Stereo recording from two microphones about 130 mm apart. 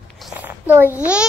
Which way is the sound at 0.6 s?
15° right (ahead or behind).